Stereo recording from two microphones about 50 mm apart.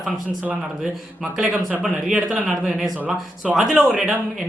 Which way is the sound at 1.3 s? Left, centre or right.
Centre.